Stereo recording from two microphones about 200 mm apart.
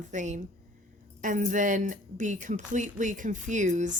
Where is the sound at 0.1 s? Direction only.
35° right (ahead or behind).